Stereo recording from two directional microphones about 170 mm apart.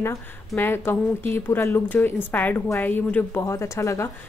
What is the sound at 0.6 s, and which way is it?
A woman's voice, 15° left (ahead or behind).